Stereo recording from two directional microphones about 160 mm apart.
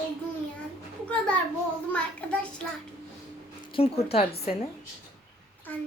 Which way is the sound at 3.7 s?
40° left (ahead or behind).